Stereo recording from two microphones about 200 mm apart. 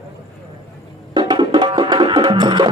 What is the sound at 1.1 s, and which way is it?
Music, 25° right (ahead or behind).